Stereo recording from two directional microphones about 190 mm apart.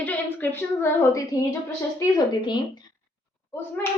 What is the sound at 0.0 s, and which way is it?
A woman's voice, 10° left (ahead or behind).